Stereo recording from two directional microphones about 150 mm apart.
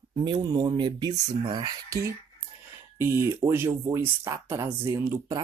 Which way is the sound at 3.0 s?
20° right (ahead or behind).